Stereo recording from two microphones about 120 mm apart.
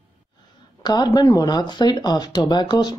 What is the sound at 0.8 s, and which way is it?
Speech, 35° left (ahead or behind).